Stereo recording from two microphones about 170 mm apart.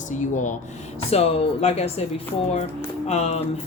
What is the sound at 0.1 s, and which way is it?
Speech, 45° left (ahead or behind).